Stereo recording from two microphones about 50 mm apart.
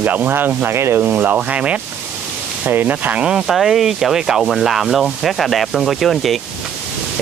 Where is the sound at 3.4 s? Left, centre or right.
Centre.